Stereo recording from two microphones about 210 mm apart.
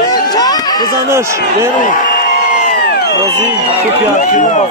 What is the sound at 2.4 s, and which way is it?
Crowd, 35° left (ahead or behind).